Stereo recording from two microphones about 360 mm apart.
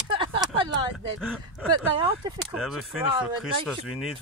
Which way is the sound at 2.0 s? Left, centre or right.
Centre.